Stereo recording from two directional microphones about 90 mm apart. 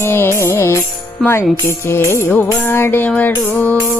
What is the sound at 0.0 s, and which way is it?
Music, 30° left (ahead or behind).